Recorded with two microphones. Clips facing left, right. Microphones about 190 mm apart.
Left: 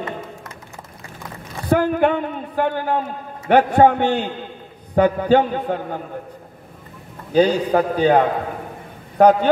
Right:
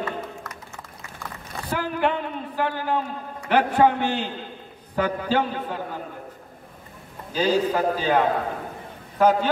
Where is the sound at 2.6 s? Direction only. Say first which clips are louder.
Left 5 dB; 55° left (ahead or behind).